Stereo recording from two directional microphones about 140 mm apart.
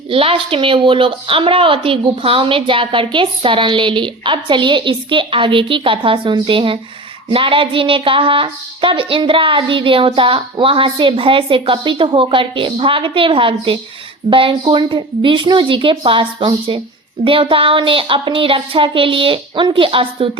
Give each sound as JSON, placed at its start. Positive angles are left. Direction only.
{"t": 0.1, "sound": "a woman's voice", "side_deg": -40}